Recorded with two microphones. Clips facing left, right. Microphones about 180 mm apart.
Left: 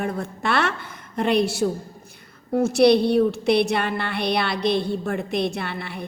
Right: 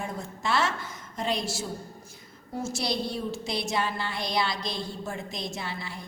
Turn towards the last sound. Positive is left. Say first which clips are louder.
# left 6 dB
turn(degrees=60)  # may be behind; listen again after turning